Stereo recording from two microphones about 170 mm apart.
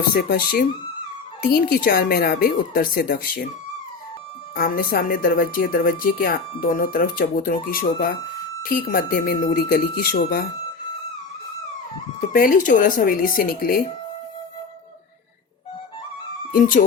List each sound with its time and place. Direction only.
0.1 s speech: 60° left (ahead or behind)
4.5 s speech: 60° left (ahead or behind)
12.3 s speech: 55° left (ahead or behind)
16.5 s speech: 55° left (ahead or behind)